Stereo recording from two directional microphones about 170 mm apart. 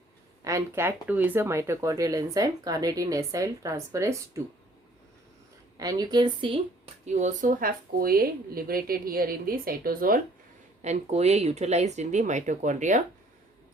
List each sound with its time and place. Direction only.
0.4 s speech: 15° right (ahead or behind)
5.7 s speech: 20° right (ahead or behind)
7.0 s speech: 45° right (ahead or behind)
10.8 s speech: 40° right (ahead or behind)